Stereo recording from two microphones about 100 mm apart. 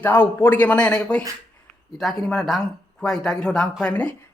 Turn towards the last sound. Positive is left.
turn(degrees=15)  # may be behind; listen again after turning